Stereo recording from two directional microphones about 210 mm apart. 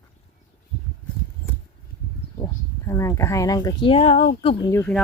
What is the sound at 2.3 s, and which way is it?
Speech, 15° left (ahead or behind).